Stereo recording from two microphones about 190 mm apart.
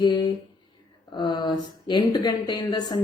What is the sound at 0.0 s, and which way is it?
Speech, 25° left (ahead or behind).